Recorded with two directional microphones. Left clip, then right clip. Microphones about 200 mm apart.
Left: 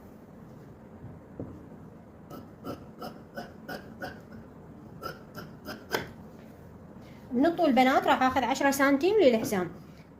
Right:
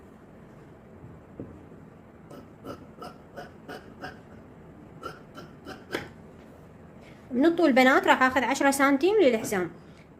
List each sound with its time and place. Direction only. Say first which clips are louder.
7.4 s a woman's voice: right 3 dB; 60° right (ahead or behind); by 8.7 s 45° right (ahead or behind)
8.7 s a woman's voice: right 1 dB; 20° right (ahead or behind)